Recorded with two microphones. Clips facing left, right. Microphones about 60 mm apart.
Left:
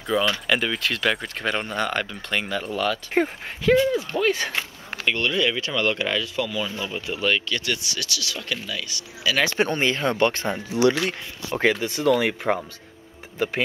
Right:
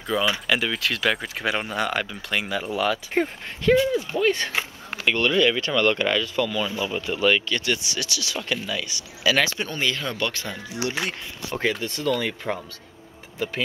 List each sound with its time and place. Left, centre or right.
0.2 s speech: centre
9.5 s speech: left
11.8 s speech: centre
12.2 s speech: left